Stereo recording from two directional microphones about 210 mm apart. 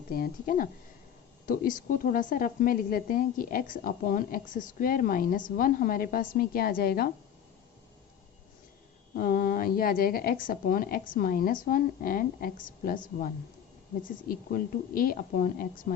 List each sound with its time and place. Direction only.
0.1 s a woman's voice: 40° left (ahead or behind)
9.1 s speech: 45° left (ahead or behind)
14.0 s speech: 40° left (ahead or behind)